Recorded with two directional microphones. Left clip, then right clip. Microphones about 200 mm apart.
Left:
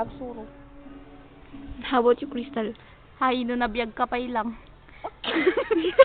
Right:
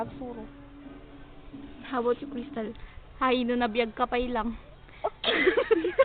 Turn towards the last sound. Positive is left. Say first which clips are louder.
# left 1 dB
turn(degrees=10)  # may be behind; listen again after turning